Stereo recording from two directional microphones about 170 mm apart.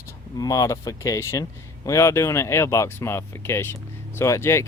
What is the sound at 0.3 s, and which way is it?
Speech, 20° left (ahead or behind).